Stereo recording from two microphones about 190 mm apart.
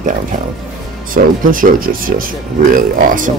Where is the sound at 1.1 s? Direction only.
45° right (ahead or behind).